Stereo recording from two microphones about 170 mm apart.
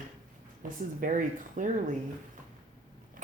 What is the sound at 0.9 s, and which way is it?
Speech, 50° right (ahead or behind).